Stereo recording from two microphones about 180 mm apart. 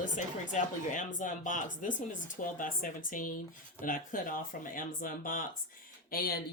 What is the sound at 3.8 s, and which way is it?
A woman's voice, 50° left (ahead or behind).